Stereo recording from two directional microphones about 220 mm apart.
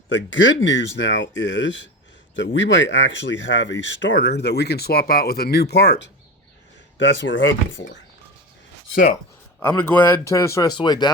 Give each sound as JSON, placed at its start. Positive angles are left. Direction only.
{"t": 0.1, "sound": "speech", "side_deg": 60}
{"t": 9.6, "sound": "speech", "side_deg": 10}